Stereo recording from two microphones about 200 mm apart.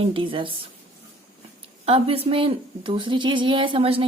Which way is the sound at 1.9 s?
30° right (ahead or behind).